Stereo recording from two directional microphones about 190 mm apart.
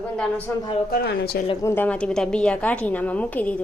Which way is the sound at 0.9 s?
55° left (ahead or behind).